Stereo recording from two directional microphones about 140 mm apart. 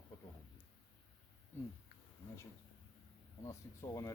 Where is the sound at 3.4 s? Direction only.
20° left (ahead or behind).